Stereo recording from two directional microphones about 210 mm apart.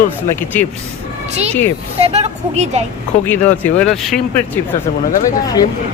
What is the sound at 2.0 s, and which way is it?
Speech, 30° right (ahead or behind).